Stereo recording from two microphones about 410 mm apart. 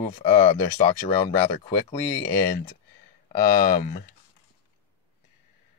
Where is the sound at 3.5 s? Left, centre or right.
Left.